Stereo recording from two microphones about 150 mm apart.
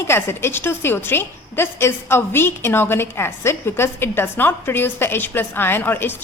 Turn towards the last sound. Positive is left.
turn(degrees=15)  # may be behind; listen again after turning